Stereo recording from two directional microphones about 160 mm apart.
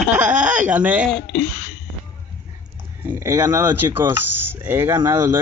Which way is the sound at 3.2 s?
15° right (ahead or behind).